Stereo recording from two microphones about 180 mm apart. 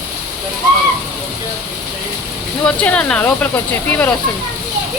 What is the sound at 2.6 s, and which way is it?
Speech, 5° left (ahead or behind).